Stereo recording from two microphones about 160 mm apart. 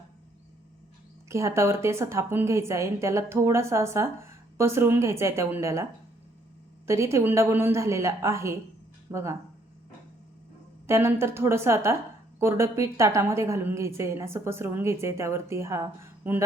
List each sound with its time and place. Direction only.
1.3 s a woman's voice: 15° right (ahead or behind)
10.8 s a woman's voice: 15° right (ahead or behind)